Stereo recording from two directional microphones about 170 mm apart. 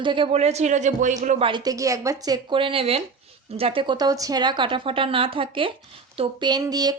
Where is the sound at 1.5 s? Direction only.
25° right (ahead or behind).